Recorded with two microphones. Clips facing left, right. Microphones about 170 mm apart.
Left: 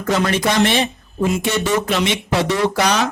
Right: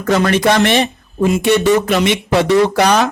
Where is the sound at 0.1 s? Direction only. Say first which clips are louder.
Right 5 dB; 60° right (ahead or behind).